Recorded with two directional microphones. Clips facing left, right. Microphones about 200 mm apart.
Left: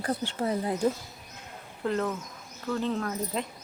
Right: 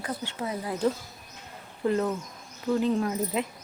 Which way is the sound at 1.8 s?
10° right (ahead or behind).